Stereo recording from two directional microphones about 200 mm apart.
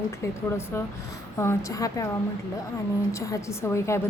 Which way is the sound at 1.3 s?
15° left (ahead or behind).